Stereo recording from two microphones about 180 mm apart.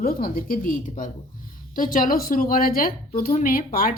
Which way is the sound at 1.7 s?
50° left (ahead or behind).